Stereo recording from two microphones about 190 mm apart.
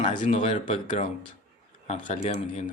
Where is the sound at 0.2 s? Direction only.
35° left (ahead or behind).